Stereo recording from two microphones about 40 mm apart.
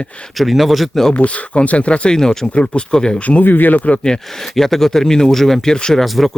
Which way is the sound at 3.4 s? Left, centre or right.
Left.